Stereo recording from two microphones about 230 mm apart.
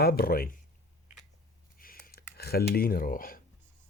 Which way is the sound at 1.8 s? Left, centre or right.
Left.